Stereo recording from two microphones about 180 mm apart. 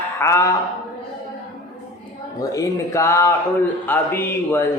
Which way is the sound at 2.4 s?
20° left (ahead or behind).